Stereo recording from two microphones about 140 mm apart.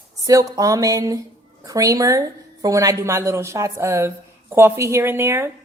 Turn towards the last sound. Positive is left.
turn(degrees=-20)  # may be behind; listen again after turning